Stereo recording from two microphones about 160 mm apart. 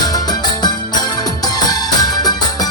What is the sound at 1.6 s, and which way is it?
Music, 25° left (ahead or behind).